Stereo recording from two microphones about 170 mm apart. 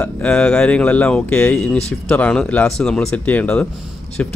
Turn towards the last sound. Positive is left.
turn(degrees=10)  # may be behind; listen again after turning